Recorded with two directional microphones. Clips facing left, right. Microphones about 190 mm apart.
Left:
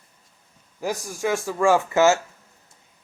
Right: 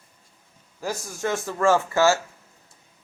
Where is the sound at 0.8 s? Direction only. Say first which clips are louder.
Left 2 dB; 15° left (ahead or behind).